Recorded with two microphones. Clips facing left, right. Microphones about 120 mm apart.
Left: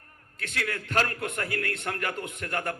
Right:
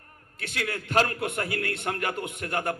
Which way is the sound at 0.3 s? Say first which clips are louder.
Right 1 dB; 20° right (ahead or behind).